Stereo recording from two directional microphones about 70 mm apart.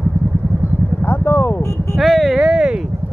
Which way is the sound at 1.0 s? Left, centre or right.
Left.